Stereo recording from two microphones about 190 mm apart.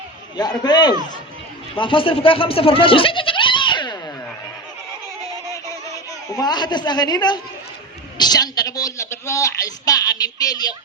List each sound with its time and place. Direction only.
0.3 s a woman's voice: 20° left (ahead or behind)
6.2 s a woman's voice: 20° left (ahead or behind)